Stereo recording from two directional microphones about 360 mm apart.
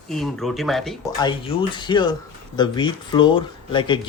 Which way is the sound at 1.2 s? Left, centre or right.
Centre.